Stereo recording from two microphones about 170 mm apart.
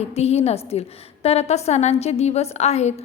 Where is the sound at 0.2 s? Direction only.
40° left (ahead or behind).